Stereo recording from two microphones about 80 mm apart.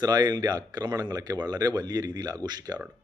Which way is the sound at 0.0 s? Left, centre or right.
Right.